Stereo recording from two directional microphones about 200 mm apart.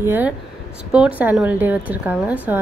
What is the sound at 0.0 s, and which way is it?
Speech, 10° right (ahead or behind).